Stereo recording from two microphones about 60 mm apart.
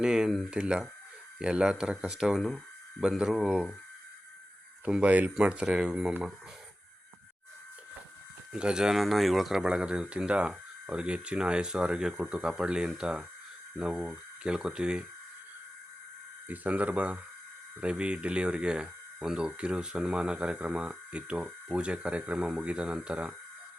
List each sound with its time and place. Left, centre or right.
0.0 s speech: centre
5.0 s speech: right
8.5 s speech: centre
9.0 s speech: centre
16.5 s speech: right